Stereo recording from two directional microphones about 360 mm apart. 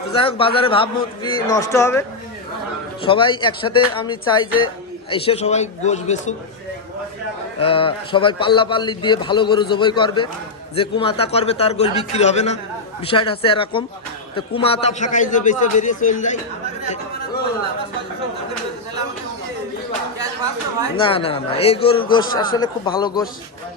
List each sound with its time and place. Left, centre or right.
0.2 s a man's voice: centre
7.6 s a man's voice: centre
20.9 s a man's voice: centre